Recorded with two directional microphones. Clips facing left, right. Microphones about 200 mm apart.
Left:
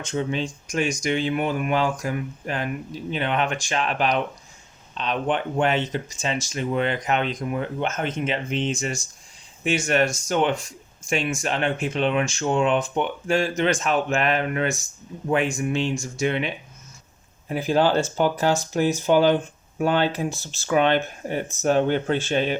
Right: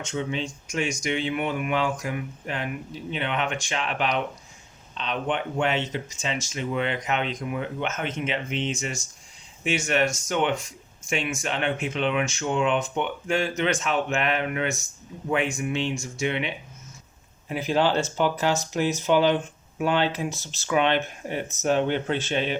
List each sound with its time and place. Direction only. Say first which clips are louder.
0.1 s speech: left 4 dB; 45° left (ahead or behind)
17.5 s speech: left 3 dB; 45° left (ahead or behind)